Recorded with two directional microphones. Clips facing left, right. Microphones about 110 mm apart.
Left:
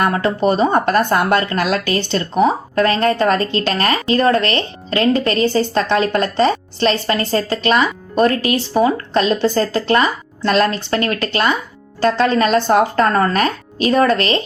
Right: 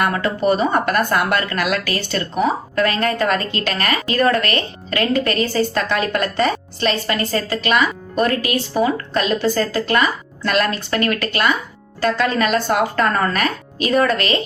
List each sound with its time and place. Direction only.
0.0 s speech: 30° left (ahead or behind)